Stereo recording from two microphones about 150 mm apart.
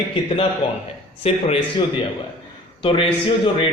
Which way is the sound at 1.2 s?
40° left (ahead or behind).